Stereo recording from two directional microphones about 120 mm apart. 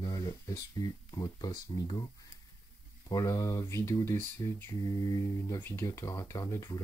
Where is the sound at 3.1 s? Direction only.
30° left (ahead or behind).